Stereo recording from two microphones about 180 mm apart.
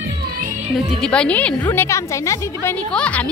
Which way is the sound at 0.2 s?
55° right (ahead or behind).